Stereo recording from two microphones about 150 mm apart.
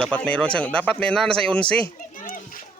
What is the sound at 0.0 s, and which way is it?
Speech, 5° left (ahead or behind).